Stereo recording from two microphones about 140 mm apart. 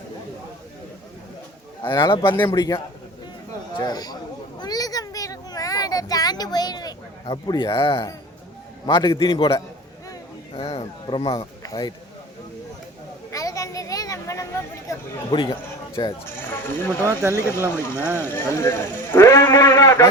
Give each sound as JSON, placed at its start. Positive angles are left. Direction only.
{"t": 1.9, "sound": "a man's voice", "side_deg": 30}
{"t": 4.6, "sound": "a sound", "side_deg": 25}
{"t": 8.9, "sound": "a man's voice", "side_deg": 35}
{"t": 11.6, "sound": "speech", "side_deg": 25}
{"t": 13.3, "sound": "a sound", "side_deg": 25}
{"t": 15.3, "sound": "a man's voice", "side_deg": 35}
{"t": 16.5, "sound": "speech", "side_deg": 15}
{"t": 17.1, "sound": "speech", "side_deg": -20}
{"t": 17.7, "sound": "speech", "side_deg": 15}